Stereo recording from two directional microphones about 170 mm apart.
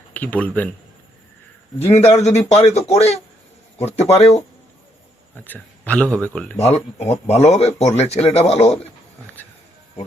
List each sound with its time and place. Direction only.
0.1 s speech: 10° left (ahead or behind)
1.8 s a man's voice: 40° left (ahead or behind)
5.5 s a man's voice: 10° left (ahead or behind)
6.6 s a man's voice: 40° left (ahead or behind)